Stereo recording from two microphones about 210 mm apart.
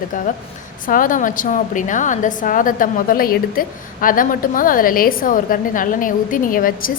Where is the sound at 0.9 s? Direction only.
40° left (ahead or behind).